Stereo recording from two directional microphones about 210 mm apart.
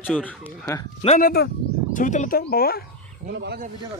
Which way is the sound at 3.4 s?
50° right (ahead or behind).